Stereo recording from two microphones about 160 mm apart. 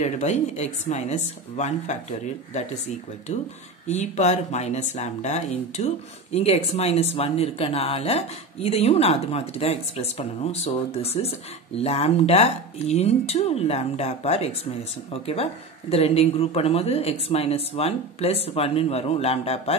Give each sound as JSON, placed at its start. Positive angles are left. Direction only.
{"t": 0.0, "sound": "speech", "side_deg": 45}
{"t": 3.8, "sound": "speech", "side_deg": 45}